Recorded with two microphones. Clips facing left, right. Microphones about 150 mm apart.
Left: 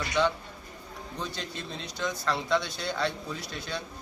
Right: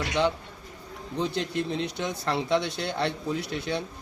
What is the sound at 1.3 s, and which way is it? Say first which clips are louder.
Speech: right 9 dB; 65° right (ahead or behind).